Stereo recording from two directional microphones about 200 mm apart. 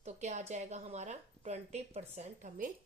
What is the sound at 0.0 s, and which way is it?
A woman's voice, 35° right (ahead or behind).